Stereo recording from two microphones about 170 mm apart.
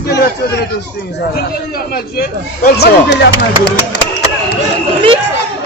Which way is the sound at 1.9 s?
60° left (ahead or behind).